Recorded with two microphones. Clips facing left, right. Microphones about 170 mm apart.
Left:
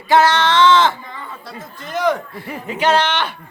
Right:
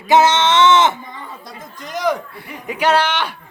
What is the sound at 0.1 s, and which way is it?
Speech, 20° right (ahead or behind).